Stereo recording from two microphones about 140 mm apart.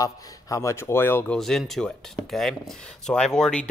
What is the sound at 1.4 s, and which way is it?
Speech, centre (ahead or behind).